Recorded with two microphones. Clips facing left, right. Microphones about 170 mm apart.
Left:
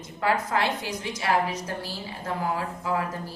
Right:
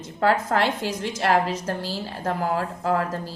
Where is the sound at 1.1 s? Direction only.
55° right (ahead or behind).